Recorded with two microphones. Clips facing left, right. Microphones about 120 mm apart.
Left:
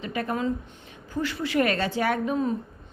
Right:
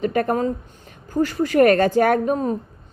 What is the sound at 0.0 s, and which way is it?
A woman's voice, 50° right (ahead or behind).